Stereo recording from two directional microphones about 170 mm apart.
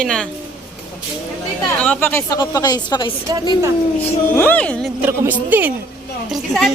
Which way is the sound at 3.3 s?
20° right (ahead or behind).